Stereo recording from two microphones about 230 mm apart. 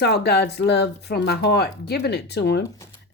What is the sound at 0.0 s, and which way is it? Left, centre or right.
Speech, left.